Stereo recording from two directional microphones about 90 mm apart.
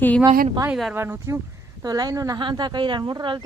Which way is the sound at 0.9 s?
30° right (ahead or behind).